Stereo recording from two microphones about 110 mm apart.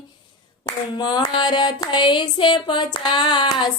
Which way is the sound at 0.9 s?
40° left (ahead or behind).